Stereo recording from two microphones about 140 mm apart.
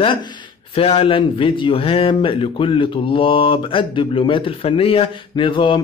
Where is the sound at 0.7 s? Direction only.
45° left (ahead or behind).